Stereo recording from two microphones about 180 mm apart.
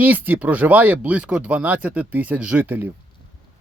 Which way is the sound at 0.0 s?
10° right (ahead or behind).